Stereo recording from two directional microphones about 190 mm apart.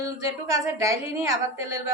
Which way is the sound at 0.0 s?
15° right (ahead or behind).